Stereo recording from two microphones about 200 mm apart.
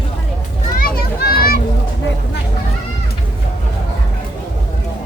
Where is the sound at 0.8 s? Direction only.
45° left (ahead or behind).